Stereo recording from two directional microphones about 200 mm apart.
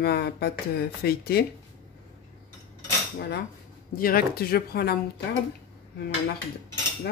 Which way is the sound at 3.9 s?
45° left (ahead or behind).